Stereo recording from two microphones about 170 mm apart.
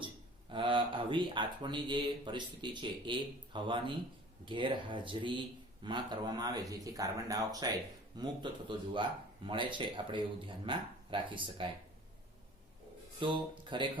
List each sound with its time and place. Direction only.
0.5 s speech: 30° right (ahead or behind)
13.1 s speech: 30° right (ahead or behind)